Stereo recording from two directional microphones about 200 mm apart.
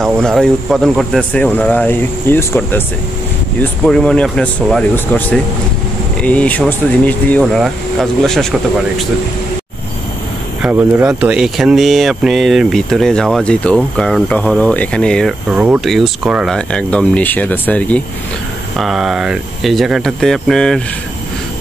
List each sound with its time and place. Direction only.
0.0 s speech: centre (ahead or behind)
3.8 s speech: 5° left (ahead or behind)
10.6 s speech: 10° right (ahead or behind)